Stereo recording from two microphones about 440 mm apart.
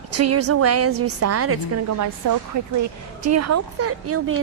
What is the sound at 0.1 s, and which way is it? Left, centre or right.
Speech, right.